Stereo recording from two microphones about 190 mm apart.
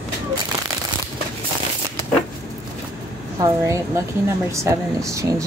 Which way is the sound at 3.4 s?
15° right (ahead or behind).